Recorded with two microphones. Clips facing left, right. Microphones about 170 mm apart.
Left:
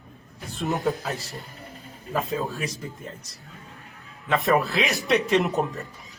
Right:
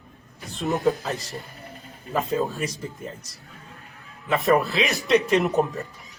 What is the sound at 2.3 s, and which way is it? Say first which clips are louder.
Speech: right 3 dB; centre (ahead or behind).